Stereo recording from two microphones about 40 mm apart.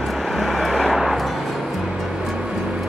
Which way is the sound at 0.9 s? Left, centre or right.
Centre.